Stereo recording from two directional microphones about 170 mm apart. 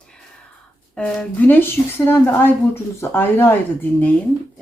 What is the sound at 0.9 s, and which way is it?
A woman's voice, 5° left (ahead or behind).